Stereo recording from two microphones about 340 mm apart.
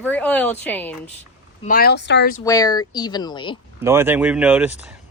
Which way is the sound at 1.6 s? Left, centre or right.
Left.